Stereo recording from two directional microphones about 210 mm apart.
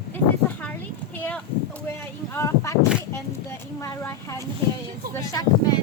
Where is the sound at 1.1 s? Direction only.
5° left (ahead or behind).